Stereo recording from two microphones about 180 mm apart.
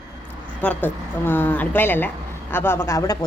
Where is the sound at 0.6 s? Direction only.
10° left (ahead or behind).